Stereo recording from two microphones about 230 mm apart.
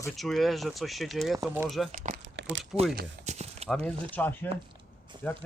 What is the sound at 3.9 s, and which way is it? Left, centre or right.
Speech, centre.